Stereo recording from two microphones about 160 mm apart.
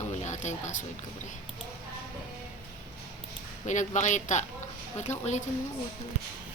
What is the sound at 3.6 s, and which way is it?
Speech, 50° left (ahead or behind).